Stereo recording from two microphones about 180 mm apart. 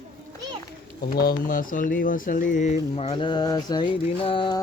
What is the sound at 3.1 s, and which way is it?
Mantra, 25° left (ahead or behind).